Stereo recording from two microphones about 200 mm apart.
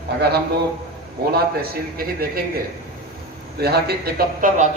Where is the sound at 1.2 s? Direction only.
50° right (ahead or behind).